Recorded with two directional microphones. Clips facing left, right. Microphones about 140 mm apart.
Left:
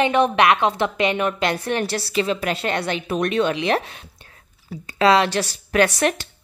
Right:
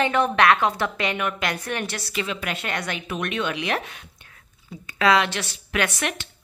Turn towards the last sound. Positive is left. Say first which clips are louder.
# left 7 dB
turn(degrees=35)  # may be behind; listen again after turning